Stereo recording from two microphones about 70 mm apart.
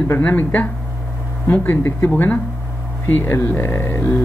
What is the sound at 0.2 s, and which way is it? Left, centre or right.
Speech, left.